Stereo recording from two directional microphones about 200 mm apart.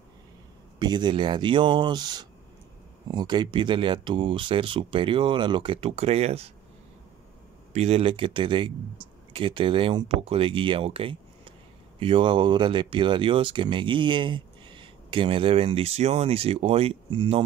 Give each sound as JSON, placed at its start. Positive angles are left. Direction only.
{"t": 0.7, "sound": "speech", "side_deg": -20}
{"t": 7.7, "sound": "speech", "side_deg": -30}